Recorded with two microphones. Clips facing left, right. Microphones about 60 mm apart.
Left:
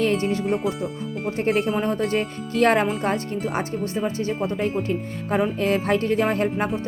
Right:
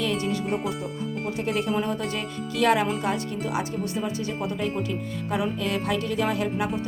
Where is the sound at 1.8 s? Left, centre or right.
Left.